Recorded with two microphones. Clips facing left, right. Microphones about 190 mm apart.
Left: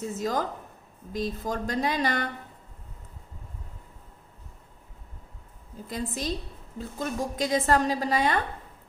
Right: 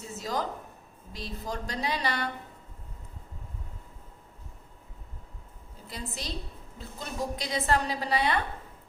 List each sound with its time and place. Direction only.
0.2 s a woman's voice: 50° left (ahead or behind)
5.9 s a woman's voice: 45° left (ahead or behind)